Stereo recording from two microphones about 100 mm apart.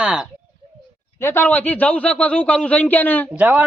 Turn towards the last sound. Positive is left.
turn(degrees=-15)  # may be behind; listen again after turning